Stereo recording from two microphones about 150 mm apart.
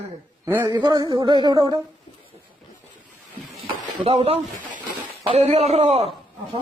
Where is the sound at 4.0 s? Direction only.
40° right (ahead or behind).